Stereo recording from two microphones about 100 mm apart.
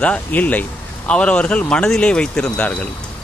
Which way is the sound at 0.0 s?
15° left (ahead or behind).